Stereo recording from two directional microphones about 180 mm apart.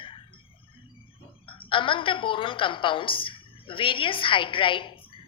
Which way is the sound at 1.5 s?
30° left (ahead or behind).